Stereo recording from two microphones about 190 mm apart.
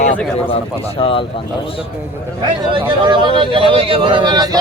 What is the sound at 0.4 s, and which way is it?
Speech, 30° left (ahead or behind).